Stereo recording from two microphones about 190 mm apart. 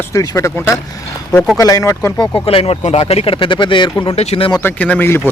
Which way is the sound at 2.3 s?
30° left (ahead or behind).